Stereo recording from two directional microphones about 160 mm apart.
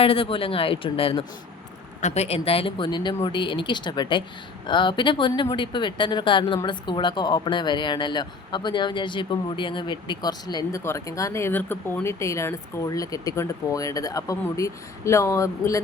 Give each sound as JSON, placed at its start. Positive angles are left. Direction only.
{"t": 0.0, "sound": "speech", "side_deg": 35}
{"t": 2.0, "sound": "speech", "side_deg": 45}